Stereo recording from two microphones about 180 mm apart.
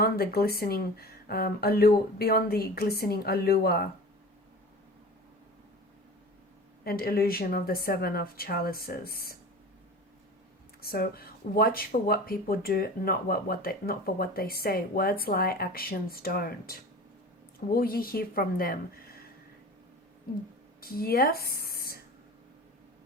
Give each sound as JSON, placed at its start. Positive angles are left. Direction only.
{"t": 0.0, "sound": "speech", "side_deg": 55}
{"t": 6.8, "sound": "speech", "side_deg": 55}
{"t": 10.8, "sound": "speech", "side_deg": 60}
{"t": 20.8, "sound": "speech", "side_deg": 55}